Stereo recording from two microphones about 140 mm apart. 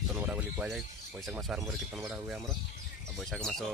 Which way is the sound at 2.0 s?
15° right (ahead or behind).